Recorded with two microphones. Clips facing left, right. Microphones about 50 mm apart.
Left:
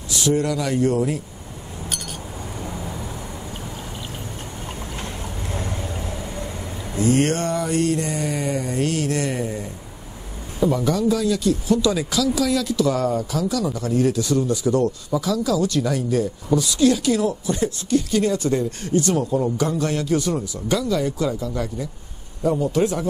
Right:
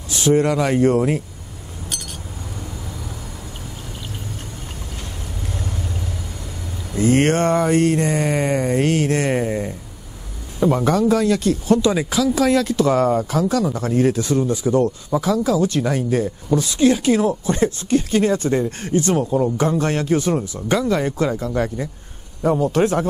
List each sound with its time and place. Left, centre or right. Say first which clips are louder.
0.1 s speech: right 4 dB; right
7.0 s speech: right 3 dB; right
11.8 s speech: right 2 dB; right
15.1 s speech: right 4 dB; right